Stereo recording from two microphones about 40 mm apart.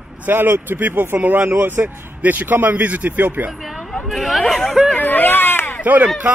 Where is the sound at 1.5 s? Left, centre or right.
Right.